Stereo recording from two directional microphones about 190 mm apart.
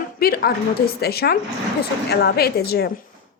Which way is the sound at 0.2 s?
50° left (ahead or behind).